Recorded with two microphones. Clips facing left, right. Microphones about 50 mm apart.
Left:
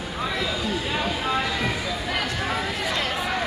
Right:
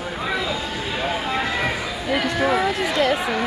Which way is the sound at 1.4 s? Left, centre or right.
Right.